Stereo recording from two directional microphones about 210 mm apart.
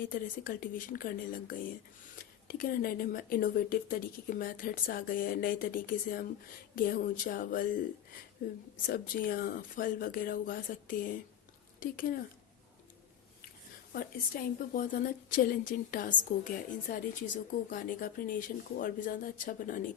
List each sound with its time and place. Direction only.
0.1 s speech: 40° left (ahead or behind)
8.7 s speech: 40° left (ahead or behind)
13.9 s speech: 45° left (ahead or behind)